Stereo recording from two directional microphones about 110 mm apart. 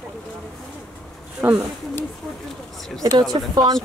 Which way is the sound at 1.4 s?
15° right (ahead or behind).